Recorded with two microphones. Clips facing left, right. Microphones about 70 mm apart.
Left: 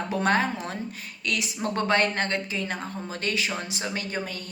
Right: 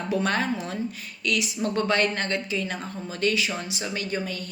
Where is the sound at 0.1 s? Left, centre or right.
Left.